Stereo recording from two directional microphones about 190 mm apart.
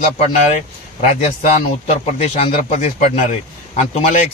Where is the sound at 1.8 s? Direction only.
35° left (ahead or behind).